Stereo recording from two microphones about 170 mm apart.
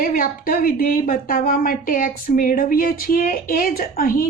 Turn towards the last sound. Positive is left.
turn(degrees=55)  # may be behind; listen again after turning